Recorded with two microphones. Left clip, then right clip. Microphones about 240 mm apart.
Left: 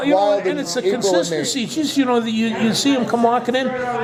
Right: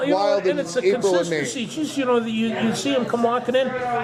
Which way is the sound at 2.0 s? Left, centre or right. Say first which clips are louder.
Left 2 dB; left.